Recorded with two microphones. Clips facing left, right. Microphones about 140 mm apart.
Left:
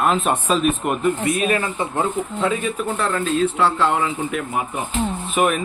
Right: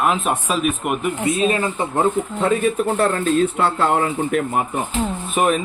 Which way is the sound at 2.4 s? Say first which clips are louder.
Right 5 dB; 45° right (ahead or behind).